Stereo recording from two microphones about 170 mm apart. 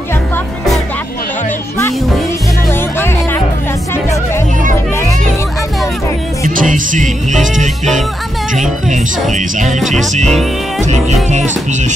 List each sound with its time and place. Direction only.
6.4 s music: 50° right (ahead or behind)
9.3 s music: 50° right (ahead or behind)
9.7 s music: centre (ahead or behind)
11.2 s music: 45° right (ahead or behind)